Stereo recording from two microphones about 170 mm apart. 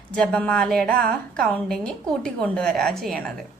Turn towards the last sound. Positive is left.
turn(degrees=0)  # may be behind; listen again after turning